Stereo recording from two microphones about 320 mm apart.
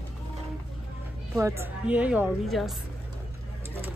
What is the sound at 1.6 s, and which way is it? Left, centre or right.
Speech, centre.